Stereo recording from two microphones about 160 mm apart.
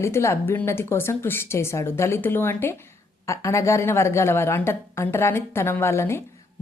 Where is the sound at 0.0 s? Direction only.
15° left (ahead or behind).